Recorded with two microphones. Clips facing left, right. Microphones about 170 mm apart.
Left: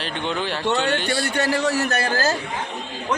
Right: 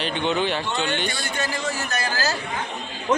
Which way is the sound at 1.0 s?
65° left (ahead or behind).